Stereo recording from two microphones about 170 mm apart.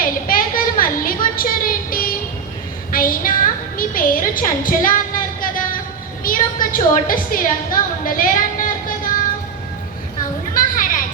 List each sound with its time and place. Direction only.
0.0 s a sound: 55° left (ahead or behind)
6.2 s a woman's voice: 55° left (ahead or behind)
10.5 s children playing: 55° left (ahead or behind)